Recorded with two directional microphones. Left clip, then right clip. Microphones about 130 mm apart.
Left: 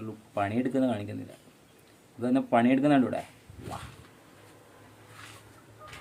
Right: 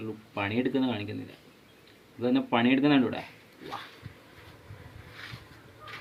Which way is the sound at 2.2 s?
40° left (ahead or behind).